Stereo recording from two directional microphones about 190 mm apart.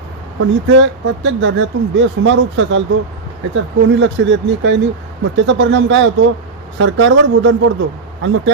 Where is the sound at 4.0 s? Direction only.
80° right.